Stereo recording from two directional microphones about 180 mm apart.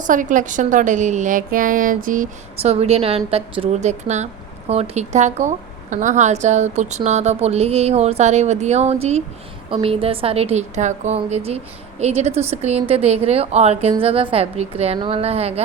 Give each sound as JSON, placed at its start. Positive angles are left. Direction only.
{"t": 0.0, "sound": "a woman's voice", "side_deg": -45}
{"t": 2.6, "sound": "a woman's voice", "side_deg": -35}